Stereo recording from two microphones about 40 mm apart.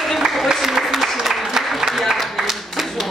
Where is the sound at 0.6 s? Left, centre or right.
Centre.